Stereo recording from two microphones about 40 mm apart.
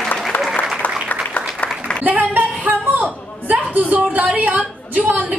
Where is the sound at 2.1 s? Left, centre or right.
Right.